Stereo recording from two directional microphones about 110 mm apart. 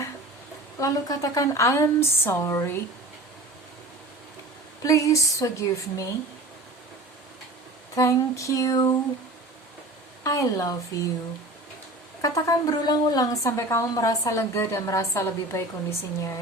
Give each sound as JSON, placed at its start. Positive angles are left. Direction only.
{"t": 0.8, "sound": "a woman's voice", "side_deg": 30}
{"t": 4.8, "sound": "a woman's voice", "side_deg": 30}
{"t": 7.9, "sound": "a woman's voice", "side_deg": 30}
{"t": 10.2, "sound": "a woman's voice", "side_deg": 30}
{"t": 12.2, "sound": "a woman's voice", "side_deg": 30}